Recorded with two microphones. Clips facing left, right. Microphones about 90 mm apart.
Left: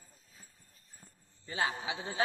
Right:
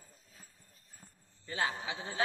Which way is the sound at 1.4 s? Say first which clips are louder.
Left 1 dB; 20° left (ahead or behind).